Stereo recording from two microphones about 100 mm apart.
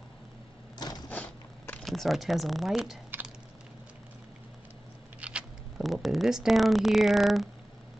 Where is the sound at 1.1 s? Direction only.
15° left (ahead or behind).